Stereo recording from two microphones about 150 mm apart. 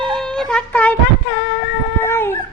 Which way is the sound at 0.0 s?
5° left (ahead or behind).